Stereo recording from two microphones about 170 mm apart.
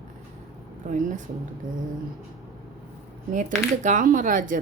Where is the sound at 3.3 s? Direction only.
50° right (ahead or behind).